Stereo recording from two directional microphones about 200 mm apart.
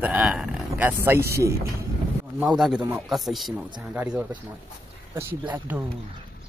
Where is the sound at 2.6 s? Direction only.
5° right (ahead or behind).